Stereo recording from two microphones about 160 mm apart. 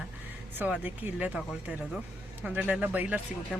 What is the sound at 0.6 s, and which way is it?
Speech, 10° right (ahead or behind).